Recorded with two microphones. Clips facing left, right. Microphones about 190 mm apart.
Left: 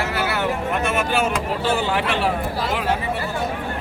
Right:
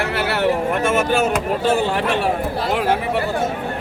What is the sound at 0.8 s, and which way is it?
Speech, 45° right (ahead or behind).